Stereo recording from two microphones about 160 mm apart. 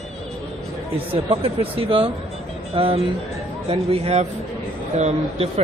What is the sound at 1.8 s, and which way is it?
Speech, 35° right (ahead or behind).